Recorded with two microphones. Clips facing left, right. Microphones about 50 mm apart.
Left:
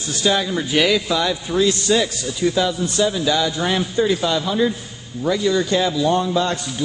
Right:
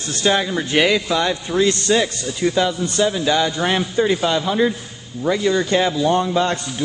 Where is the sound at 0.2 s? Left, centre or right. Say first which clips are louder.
Right 1 dB; right.